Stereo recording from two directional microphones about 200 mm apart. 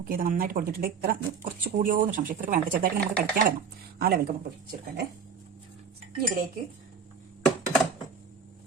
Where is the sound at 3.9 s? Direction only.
50° right (ahead or behind).